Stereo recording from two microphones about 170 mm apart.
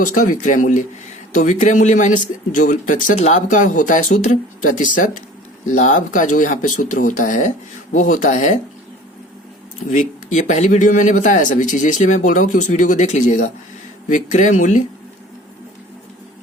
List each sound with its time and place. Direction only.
0.1 s a man's voice: 45° left (ahead or behind)
9.9 s a man's voice: 45° left (ahead or behind)